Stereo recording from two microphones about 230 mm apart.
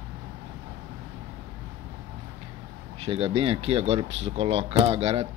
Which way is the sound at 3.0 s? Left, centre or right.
Right.